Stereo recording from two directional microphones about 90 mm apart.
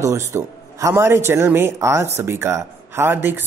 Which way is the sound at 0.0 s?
35° right (ahead or behind).